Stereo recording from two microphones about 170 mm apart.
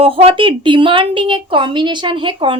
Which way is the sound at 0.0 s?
35° right (ahead or behind).